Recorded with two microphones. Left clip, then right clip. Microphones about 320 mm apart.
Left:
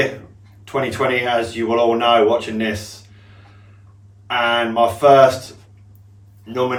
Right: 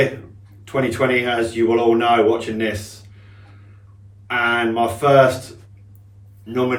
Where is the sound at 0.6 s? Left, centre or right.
Centre.